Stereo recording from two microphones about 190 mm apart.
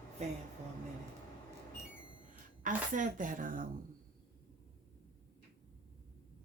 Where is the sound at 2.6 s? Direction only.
45° right (ahead or behind).